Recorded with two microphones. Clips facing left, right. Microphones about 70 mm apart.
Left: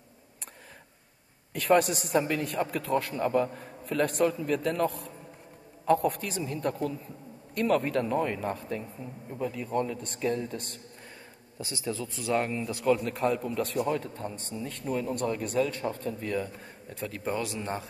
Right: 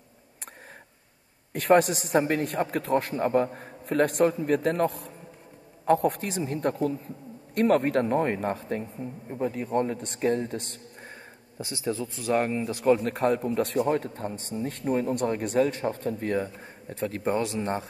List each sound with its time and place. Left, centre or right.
1.5 s a man's voice: right
4.3 s a man's voice: right
5.9 s a man's voice: right
13.1 s a man's voice: right